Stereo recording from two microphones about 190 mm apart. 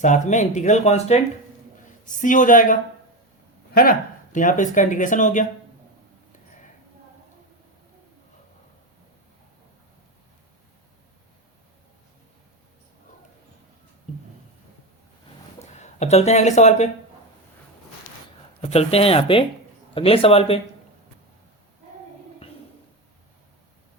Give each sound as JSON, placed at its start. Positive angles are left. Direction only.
{"t": 0.0, "sound": "speech", "side_deg": 40}
{"t": 3.8, "sound": "speech", "side_deg": 45}
{"t": 15.5, "sound": "speech", "side_deg": 35}
{"t": 18.6, "sound": "a man's voice", "side_deg": 30}